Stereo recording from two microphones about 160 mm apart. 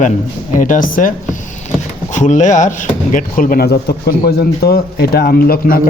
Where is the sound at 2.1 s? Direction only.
50° left (ahead or behind).